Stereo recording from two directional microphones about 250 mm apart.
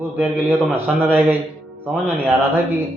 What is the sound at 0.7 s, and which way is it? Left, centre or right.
Speech, centre.